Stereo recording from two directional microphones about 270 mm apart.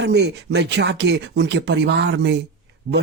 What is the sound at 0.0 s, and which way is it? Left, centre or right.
Speech, right.